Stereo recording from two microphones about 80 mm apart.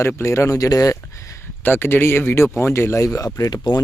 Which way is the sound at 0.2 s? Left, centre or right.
Left.